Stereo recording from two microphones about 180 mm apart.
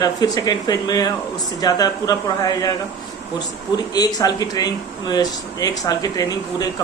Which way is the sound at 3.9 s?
20° left (ahead or behind).